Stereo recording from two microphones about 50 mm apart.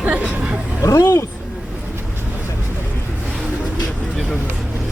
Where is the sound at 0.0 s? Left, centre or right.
Right.